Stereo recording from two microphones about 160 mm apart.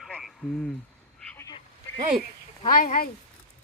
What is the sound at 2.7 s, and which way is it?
Speech, 55° left (ahead or behind).